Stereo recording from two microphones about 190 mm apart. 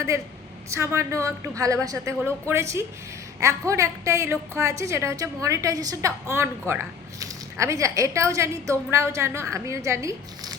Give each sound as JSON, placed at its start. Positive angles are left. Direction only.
{"t": 0.7, "sound": "a woman's voice", "side_deg": -15}